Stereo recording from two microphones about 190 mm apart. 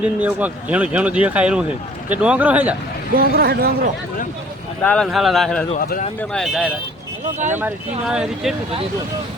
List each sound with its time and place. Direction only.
0.0 s speech: 10° right (ahead or behind)
3.2 s speech: 55° right (ahead or behind)
4.8 s speech: 10° left (ahead or behind)